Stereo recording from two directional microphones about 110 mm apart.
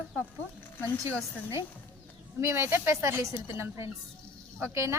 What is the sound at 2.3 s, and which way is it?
A woman's voice, 25° right (ahead or behind).